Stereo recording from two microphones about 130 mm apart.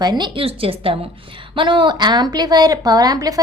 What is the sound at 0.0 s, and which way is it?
A woman's voice, 35° right (ahead or behind).